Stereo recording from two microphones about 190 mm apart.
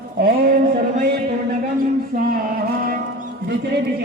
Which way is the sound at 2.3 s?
50° right (ahead or behind).